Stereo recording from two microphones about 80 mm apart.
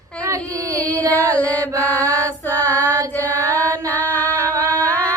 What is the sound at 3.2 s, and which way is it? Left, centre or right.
Mantra, left.